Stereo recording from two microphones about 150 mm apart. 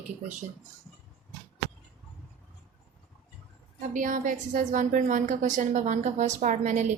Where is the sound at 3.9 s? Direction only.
60° right (ahead or behind).